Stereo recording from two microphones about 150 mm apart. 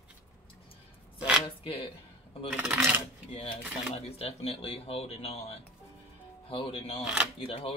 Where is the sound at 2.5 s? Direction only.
10° right (ahead or behind).